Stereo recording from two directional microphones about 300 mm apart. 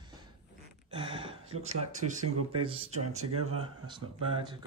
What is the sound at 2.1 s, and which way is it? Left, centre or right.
Speech, centre.